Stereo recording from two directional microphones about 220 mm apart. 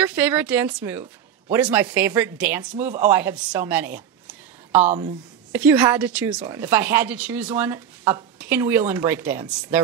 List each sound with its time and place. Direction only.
0.0 s speech: 10° right (ahead or behind)
4.8 s a woman's voice: 30° right (ahead or behind)
5.5 s speech: 10° right (ahead or behind)